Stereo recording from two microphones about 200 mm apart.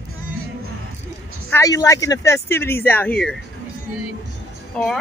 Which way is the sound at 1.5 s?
15° left (ahead or behind).